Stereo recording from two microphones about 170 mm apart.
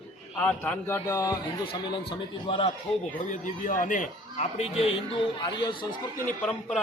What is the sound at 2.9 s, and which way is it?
Speech, centre (ahead or behind).